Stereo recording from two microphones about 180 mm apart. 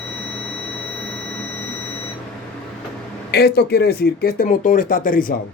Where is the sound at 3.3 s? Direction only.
60° left (ahead or behind).